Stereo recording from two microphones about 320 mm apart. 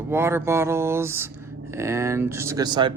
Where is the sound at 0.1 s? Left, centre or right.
Centre.